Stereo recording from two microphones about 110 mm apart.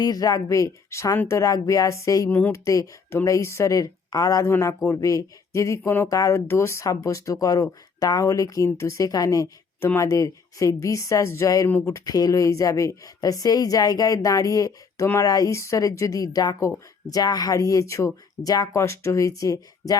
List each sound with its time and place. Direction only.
0.0 s speech: 35° left (ahead or behind)